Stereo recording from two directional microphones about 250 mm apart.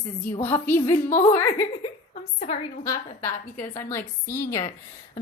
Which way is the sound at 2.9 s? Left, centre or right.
Centre.